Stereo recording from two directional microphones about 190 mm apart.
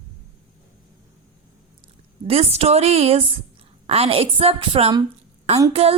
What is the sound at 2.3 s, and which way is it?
A woman's voice, 30° right (ahead or behind).